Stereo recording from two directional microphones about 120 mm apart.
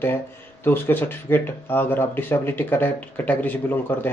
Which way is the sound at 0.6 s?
15° left (ahead or behind).